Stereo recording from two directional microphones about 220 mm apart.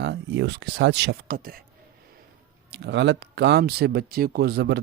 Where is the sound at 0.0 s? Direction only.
50° right (ahead or behind).